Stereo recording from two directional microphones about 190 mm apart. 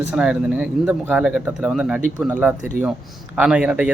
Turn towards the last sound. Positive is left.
turn(degrees=-5)  # may be behind; listen again after turning